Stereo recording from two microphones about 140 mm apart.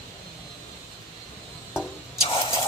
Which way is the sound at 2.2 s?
40° left (ahead or behind).